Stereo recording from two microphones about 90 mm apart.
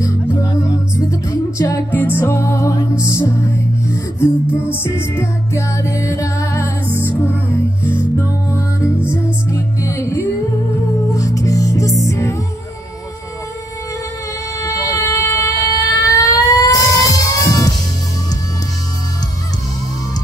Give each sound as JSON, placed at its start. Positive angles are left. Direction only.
{"t": 0.0, "sound": "music", "side_deg": 40}
{"t": 1.9, "sound": "music", "side_deg": 25}
{"t": 7.9, "sound": "music", "side_deg": 30}
{"t": 14.6, "sound": "vehicle", "side_deg": 35}
{"t": 17.1, "sound": "music", "side_deg": 40}